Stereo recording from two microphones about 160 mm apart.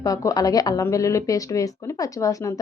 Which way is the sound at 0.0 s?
20° left (ahead or behind).